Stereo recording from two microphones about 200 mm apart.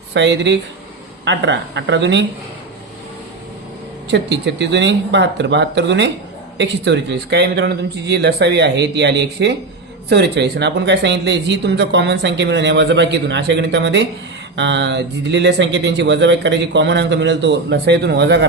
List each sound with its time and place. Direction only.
0.1 s speech: 60° right (ahead or behind)
4.1 s speech: 60° right (ahead or behind)